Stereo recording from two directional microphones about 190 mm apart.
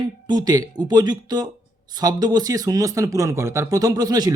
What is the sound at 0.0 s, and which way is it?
Speech, 20° right (ahead or behind).